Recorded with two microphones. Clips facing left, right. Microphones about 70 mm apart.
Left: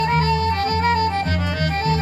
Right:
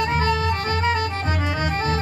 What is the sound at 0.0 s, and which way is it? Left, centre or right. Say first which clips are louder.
Music: left 3 dB; left.